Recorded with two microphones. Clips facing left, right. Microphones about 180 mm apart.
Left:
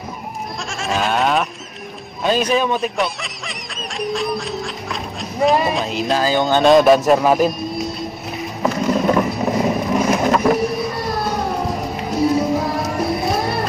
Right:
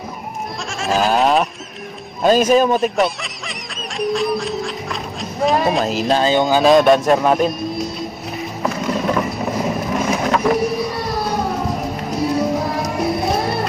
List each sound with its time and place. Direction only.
0.7 s goat: centre (ahead or behind)
2.5 s speech: 40° right (ahead or behind)
2.8 s music: centre (ahead or behind)
6.1 s speech: 25° right (ahead or behind)
6.4 s speech: centre (ahead or behind)
8.6 s mechanisms: centre (ahead or behind)
11.2 s music: centre (ahead or behind)